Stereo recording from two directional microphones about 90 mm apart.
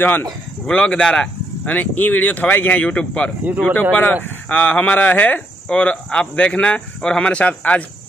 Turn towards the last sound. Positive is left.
turn(degrees=15)  # may be behind; listen again after turning